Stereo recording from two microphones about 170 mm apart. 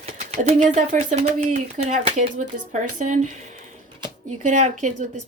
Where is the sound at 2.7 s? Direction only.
50° right (ahead or behind).